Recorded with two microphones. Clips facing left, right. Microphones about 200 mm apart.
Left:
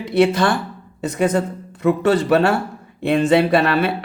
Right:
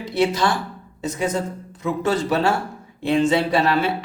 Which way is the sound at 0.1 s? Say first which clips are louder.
Left 4 dB; 55° left (ahead or behind).